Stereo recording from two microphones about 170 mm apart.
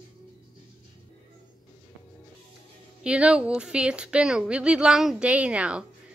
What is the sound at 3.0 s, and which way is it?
Speech, 5° right (ahead or behind).